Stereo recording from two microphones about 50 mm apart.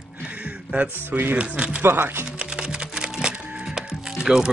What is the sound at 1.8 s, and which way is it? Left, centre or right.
Speech, right.